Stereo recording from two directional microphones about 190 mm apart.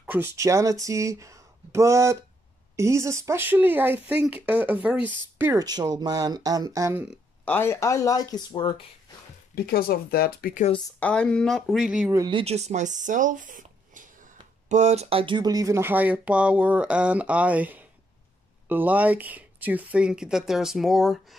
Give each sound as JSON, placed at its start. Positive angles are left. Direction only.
{"t": 0.0, "sound": "a sound", "side_deg": -10}
{"t": 0.4, "sound": "speech", "side_deg": -15}
{"t": 7.1, "sound": "speech", "side_deg": 10}
{"t": 9.7, "sound": "speech", "side_deg": 55}
{"t": 11.0, "sound": "speech", "side_deg": 5}
{"t": 12.1, "sound": "speech", "side_deg": -20}